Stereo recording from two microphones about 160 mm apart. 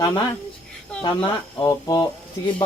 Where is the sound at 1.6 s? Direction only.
25° left (ahead or behind).